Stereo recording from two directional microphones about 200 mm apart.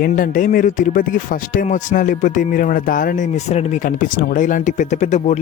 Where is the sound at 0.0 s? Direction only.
45° left (ahead or behind).